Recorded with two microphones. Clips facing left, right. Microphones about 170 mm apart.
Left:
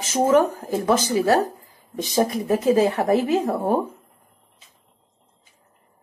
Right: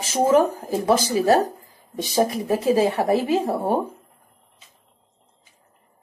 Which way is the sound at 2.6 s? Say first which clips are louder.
Left 1 dB; 30° right (ahead or behind).